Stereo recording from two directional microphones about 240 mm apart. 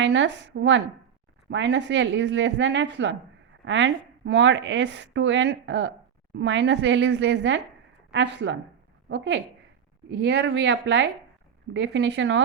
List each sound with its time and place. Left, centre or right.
0.0 s speech: right